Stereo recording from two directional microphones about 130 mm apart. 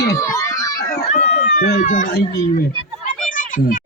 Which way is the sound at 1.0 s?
60° left (ahead or behind).